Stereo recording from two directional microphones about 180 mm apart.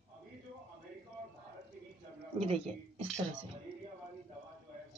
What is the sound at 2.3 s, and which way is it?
Speech, 35° right (ahead or behind).